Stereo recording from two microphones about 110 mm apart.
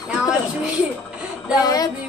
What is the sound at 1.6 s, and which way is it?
Speech, 35° left (ahead or behind).